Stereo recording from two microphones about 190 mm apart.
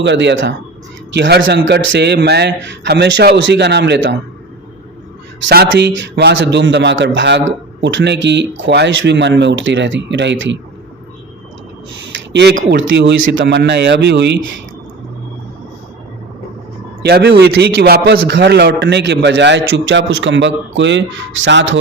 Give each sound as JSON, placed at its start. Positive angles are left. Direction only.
{"t": 0.0, "sound": "a man's voice", "side_deg": -70}
{"t": 5.5, "sound": "a man's voice", "side_deg": -60}
{"t": 12.1, "sound": "a sound", "side_deg": -65}
{"t": 12.7, "sound": "a man's voice", "side_deg": -70}
{"t": 17.0, "sound": "a man's voice", "side_deg": -60}